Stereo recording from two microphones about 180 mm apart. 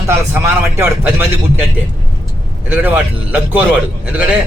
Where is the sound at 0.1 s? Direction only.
10° right (ahead or behind).